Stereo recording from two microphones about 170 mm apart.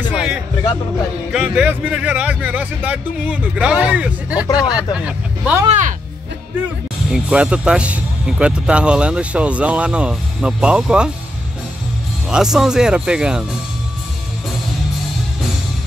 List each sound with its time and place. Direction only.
0.1 s music: 5° right (ahead or behind)
1.3 s speech: 5° right (ahead or behind)
5.7 s speech: 45° right (ahead or behind)
7.1 s speech: 5° right (ahead or behind)
12.3 s speech: 5° right (ahead or behind)